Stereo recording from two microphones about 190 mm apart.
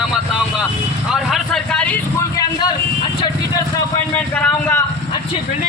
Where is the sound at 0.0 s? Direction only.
Centre (ahead or behind).